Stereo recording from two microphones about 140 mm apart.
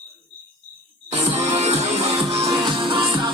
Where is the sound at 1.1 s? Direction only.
45° right (ahead or behind).